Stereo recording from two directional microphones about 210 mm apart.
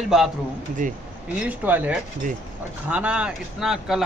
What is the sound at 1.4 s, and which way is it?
Speech, 5° right (ahead or behind).